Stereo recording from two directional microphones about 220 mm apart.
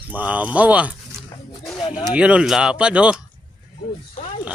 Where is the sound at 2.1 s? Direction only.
5° right (ahead or behind).